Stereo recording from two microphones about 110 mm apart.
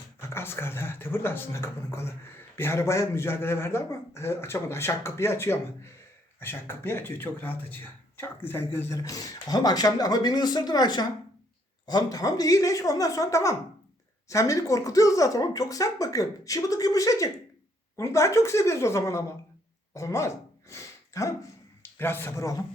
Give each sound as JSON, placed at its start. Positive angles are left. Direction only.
{"t": 0.2, "sound": "a man's voice", "side_deg": 20}
{"t": 9.0, "sound": "a man's voice", "side_deg": 35}
{"t": 19.9, "sound": "a sound", "side_deg": 30}
{"t": 21.9, "sound": "a man's voice", "side_deg": 20}